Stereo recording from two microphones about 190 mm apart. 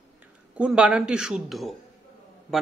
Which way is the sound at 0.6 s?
5° right (ahead or behind).